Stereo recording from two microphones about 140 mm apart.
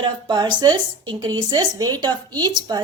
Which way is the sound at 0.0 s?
35° right (ahead or behind).